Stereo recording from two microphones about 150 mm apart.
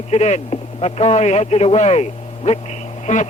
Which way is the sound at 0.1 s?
45° left (ahead or behind).